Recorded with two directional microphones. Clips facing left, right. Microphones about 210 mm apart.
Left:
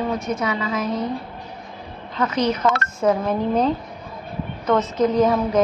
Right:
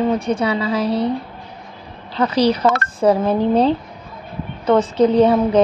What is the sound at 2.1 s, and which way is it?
A woman's voice, 35° right (ahead or behind).